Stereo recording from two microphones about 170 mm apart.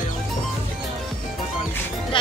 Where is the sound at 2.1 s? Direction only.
30° left (ahead or behind).